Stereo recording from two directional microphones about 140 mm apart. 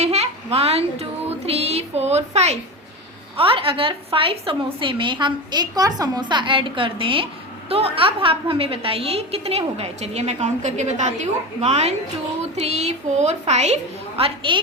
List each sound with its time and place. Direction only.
0.0 s a sound: 50° right (ahead or behind)
1.5 s a woman's voice: 50° right (ahead or behind)
3.3 s a woman's voice: 40° right (ahead or behind)
14.2 s a woman's voice: 40° right (ahead or behind)